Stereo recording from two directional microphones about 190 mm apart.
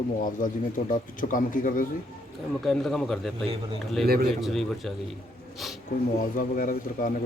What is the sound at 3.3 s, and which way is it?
Speech, 30° right (ahead or behind).